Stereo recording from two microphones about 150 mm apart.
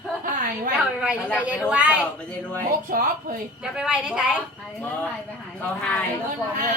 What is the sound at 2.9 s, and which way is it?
Speech, 70° right (ahead or behind).